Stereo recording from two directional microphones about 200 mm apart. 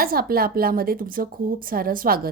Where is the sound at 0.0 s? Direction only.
50° right (ahead or behind).